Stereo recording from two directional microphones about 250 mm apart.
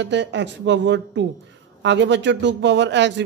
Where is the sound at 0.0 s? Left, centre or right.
Right.